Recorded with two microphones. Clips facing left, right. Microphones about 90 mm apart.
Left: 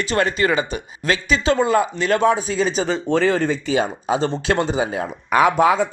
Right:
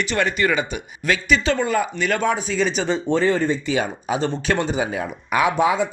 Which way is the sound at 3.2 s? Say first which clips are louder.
Left 1 dB; 85° left.